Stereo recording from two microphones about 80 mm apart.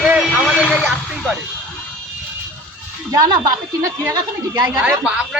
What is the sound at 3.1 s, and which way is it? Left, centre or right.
A woman's voice, right.